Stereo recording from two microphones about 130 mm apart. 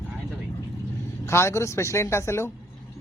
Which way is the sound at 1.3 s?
20° left (ahead or behind).